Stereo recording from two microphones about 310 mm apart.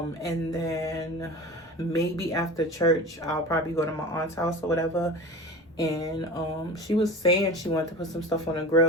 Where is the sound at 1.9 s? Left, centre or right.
Centre.